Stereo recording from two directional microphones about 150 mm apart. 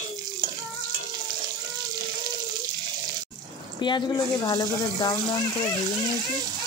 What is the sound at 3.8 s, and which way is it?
Frying, 30° left (ahead or behind).